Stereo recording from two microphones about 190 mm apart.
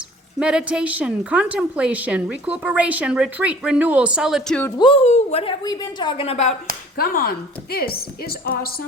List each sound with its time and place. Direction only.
0.3 s a woman's voice: 5° right (ahead or behind)
4.8 s a woman's voice: 30° left (ahead or behind)
6.9 s a woman's voice: 50° left (ahead or behind)